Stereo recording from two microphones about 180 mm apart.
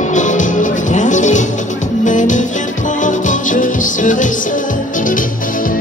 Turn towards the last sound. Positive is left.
turn(degrees=45)  # may be behind; listen again after turning